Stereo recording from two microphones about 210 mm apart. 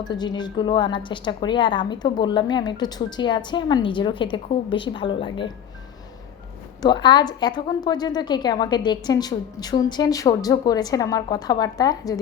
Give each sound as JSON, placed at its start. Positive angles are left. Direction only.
{"t": 0.0, "sound": "a woman's voice", "side_deg": 20}
{"t": 6.8, "sound": "a woman's voice", "side_deg": 20}